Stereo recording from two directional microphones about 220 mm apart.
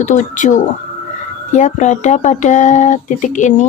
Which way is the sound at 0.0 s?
35° left (ahead or behind).